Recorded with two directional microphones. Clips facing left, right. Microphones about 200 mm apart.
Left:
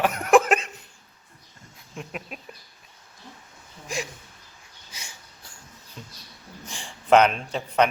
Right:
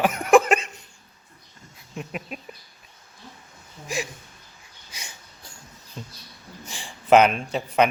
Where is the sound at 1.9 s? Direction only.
5° right (ahead or behind).